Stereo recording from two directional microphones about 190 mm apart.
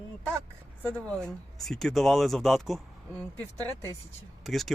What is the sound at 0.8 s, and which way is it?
Speech, 5° left (ahead or behind).